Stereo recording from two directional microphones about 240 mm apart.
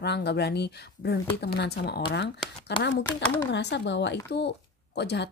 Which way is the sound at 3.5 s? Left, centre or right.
Left.